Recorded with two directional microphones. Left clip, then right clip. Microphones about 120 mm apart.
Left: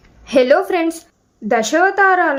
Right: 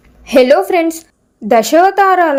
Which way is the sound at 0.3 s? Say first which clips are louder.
Right 4 dB; 30° right (ahead or behind).